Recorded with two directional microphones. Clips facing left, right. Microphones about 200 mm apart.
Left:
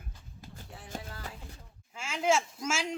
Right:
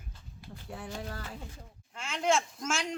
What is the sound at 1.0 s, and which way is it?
Music, 45° right (ahead or behind).